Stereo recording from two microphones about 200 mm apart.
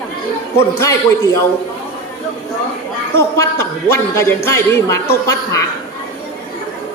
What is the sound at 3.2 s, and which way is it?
A man's voice, 15° left (ahead or behind).